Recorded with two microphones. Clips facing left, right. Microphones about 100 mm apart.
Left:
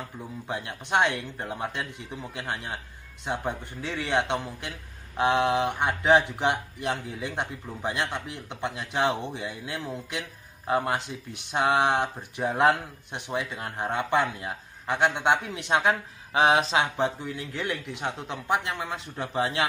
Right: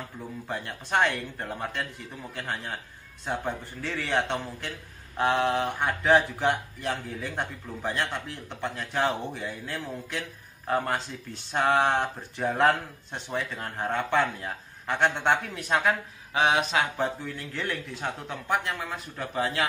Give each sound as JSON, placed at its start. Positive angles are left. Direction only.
{"t": 0.5, "sound": "speech", "side_deg": 15}